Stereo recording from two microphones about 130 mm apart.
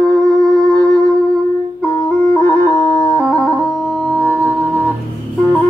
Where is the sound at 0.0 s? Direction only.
5° left (ahead or behind).